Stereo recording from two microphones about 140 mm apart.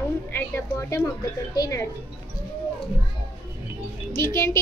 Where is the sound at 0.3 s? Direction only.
15° left (ahead or behind).